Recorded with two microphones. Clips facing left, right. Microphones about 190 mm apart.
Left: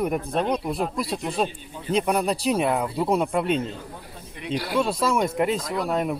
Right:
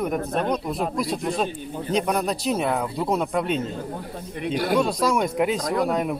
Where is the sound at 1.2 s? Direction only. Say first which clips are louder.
Right 1 dB; 5° left (ahead or behind).